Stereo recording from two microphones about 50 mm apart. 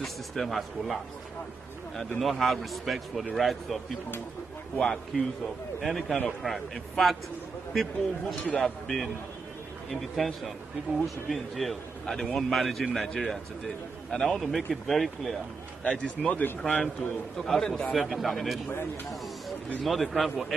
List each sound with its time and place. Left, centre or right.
0.0 s a man's voice: centre
2.1 s a man's voice: centre
4.7 s a man's voice: centre
5.8 s a man's voice: centre
14.1 s a man's voice: left
14.7 s a man's voice: centre
15.8 s a man's voice: left
17.9 s a man's voice: centre
19.8 s a man's voice: centre